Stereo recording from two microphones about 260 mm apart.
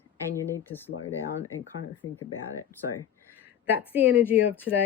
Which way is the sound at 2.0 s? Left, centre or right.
Left.